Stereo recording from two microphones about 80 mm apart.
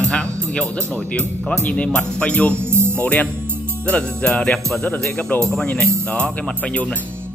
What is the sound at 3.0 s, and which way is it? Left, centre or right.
Speech, centre.